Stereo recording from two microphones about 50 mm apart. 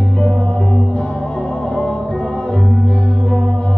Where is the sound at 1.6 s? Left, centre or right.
Left.